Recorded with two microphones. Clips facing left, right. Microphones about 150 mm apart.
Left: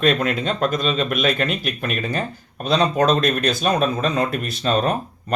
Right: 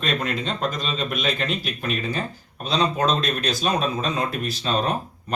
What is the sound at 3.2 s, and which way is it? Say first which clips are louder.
A man's voice: left 5 dB; 55° left (ahead or behind).